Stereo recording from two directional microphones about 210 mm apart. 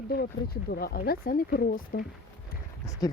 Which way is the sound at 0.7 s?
45° left (ahead or behind).